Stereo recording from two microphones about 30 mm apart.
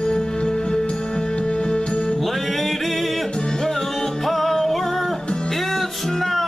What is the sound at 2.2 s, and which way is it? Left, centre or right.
Music, centre.